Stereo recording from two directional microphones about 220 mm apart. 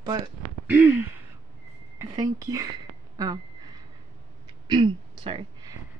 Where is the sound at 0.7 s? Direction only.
10° right (ahead or behind).